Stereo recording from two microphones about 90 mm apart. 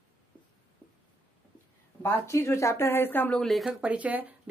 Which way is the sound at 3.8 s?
15° right (ahead or behind).